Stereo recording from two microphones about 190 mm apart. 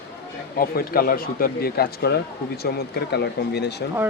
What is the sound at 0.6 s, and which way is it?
A man's voice, 50° left (ahead or behind).